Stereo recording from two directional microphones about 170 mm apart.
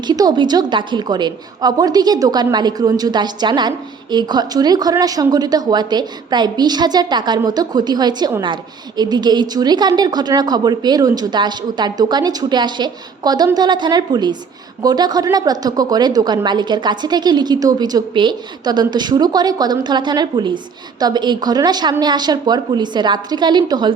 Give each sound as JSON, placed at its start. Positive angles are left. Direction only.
{"t": 0.1, "sound": "a woman's voice", "side_deg": -25}